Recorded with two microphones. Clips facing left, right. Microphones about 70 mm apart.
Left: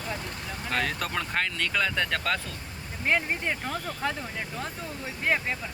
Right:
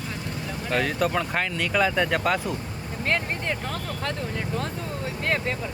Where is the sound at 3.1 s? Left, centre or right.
Centre.